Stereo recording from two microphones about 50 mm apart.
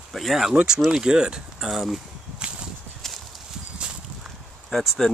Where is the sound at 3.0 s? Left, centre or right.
Centre.